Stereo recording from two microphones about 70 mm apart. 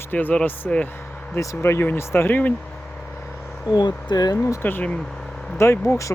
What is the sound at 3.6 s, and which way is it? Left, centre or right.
Speech, left.